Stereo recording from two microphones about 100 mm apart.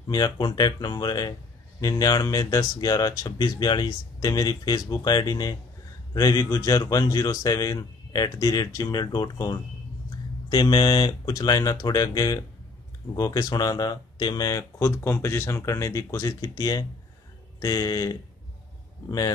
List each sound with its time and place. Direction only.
0.1 s speech: 45° left (ahead or behind)
10.5 s speech: 50° left (ahead or behind)
14.9 s speech: 25° left (ahead or behind); by 19.3 s 40° left (ahead or behind)